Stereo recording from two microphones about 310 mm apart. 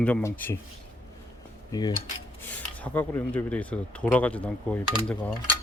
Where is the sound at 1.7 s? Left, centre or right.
Centre.